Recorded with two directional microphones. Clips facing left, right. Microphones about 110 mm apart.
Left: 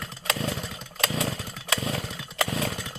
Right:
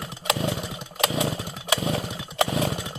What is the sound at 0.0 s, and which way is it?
Chainsaw, 20° right (ahead or behind).